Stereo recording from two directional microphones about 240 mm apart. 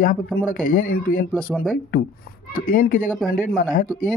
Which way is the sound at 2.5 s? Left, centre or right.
Left.